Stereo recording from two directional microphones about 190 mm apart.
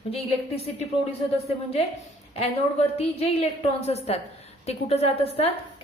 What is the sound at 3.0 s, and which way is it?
A woman's voice, 35° left (ahead or behind).